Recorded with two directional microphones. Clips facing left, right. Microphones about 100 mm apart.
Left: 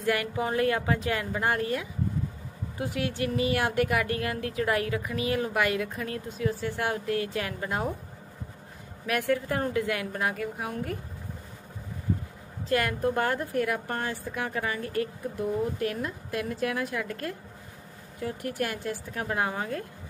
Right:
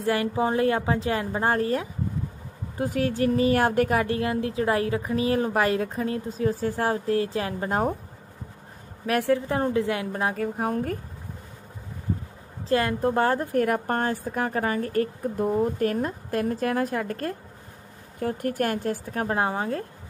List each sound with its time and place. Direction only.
0.0 s speech: 30° right (ahead or behind)
9.0 s speech: 35° right (ahead or behind)
9.5 s a woman's voice: 25° right (ahead or behind)
10.3 s speech: 40° right (ahead or behind)
12.6 s speech: 30° right (ahead or behind)